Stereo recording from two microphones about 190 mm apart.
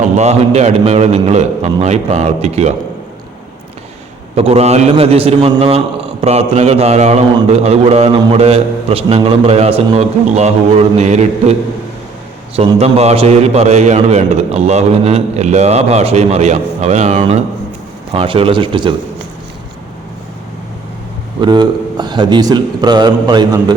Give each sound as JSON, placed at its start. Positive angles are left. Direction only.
{"t": 0.2, "sound": "a man's voice", "side_deg": -35}
{"t": 4.4, "sound": "a man's voice", "side_deg": -35}
{"t": 12.5, "sound": "a man's voice", "side_deg": -35}
{"t": 21.4, "sound": "a man's voice", "side_deg": -25}